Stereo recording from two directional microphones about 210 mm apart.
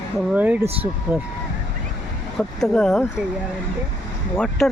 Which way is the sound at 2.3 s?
Centre (ahead or behind).